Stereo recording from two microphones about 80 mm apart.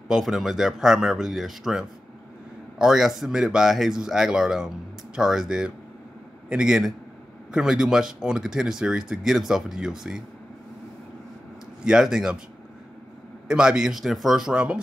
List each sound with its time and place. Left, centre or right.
0.1 s speech: centre
11.8 s speech: centre
13.5 s speech: centre